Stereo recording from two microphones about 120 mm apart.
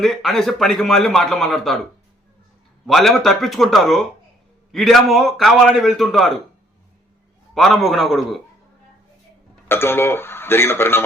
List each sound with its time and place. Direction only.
0.0 s a man's voice: centre (ahead or behind)
2.8 s a man's voice: centre (ahead or behind)
7.5 s a man's voice: 5° left (ahead or behind)
9.6 s speech: 20° left (ahead or behind)